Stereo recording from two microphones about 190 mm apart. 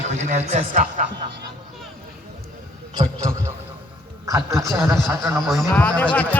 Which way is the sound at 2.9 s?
15° right (ahead or behind).